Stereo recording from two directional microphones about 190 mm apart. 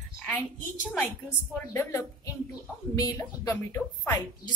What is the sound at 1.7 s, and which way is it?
A woman's voice, 15° left (ahead or behind).